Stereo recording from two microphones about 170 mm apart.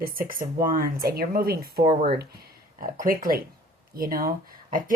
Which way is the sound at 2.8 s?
55° right (ahead or behind).